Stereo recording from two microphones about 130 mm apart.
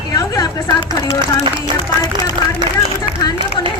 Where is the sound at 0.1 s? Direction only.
30° left (ahead or behind).